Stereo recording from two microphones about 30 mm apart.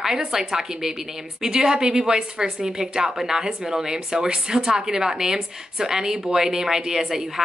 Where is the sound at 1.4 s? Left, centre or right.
Right.